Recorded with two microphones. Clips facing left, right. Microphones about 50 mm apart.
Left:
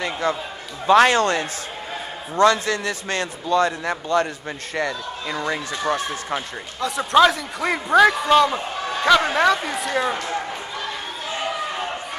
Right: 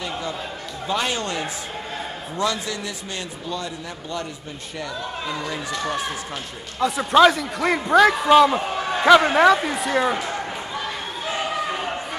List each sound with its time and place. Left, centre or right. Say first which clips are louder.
0.0 s a sound: left 5 dB; left
0.8 s a man's voice: left 10 dB; left
6.8 s a man's voice: right 1 dB; centre